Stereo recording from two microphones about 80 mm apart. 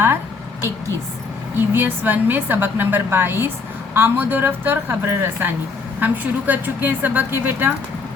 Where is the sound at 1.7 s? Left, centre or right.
Right.